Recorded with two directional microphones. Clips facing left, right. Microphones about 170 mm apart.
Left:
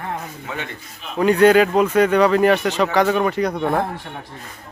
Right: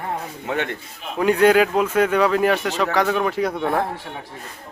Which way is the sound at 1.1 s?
5° right (ahead or behind).